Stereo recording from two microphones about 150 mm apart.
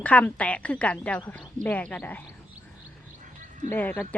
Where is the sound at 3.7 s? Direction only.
10° left (ahead or behind).